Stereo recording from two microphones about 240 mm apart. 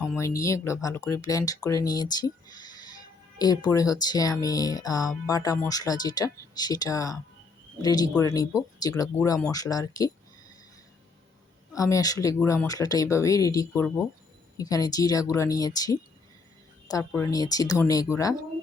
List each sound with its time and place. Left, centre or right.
0.2 s speech: centre
11.7 s speech: centre